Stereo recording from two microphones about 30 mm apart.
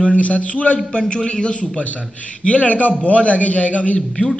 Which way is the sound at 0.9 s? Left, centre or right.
Left.